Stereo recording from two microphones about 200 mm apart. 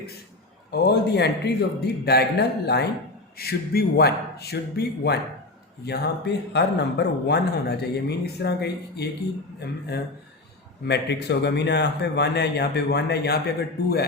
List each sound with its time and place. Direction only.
0.7 s speech: 55° left (ahead or behind)
3.3 s speech: 50° left (ahead or behind)